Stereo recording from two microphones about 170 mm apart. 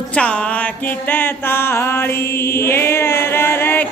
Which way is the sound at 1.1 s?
15° left (ahead or behind).